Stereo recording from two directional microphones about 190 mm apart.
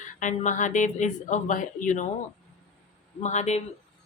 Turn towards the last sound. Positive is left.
turn(degrees=35)  # may be behind; listen again after turning